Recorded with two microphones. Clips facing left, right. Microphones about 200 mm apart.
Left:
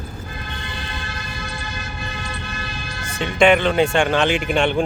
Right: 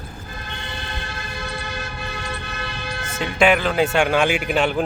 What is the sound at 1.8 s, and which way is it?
Vehicle, 60° right (ahead or behind).